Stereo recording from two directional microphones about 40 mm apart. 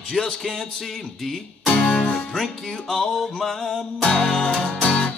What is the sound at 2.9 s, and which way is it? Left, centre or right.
Music, centre.